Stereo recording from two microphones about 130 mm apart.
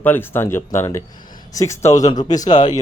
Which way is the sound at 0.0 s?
15° left (ahead or behind).